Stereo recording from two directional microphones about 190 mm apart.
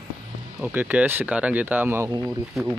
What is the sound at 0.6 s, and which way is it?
Speech, 10° right (ahead or behind).